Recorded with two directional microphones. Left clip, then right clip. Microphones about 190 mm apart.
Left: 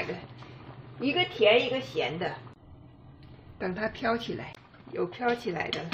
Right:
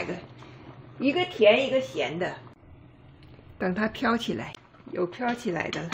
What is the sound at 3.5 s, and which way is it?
Speech, 55° right (ahead or behind).